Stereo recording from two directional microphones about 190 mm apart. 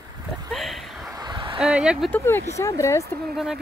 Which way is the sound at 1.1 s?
20° right (ahead or behind).